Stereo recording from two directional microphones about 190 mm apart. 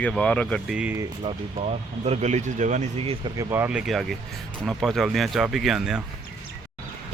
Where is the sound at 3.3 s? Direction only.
15° right (ahead or behind).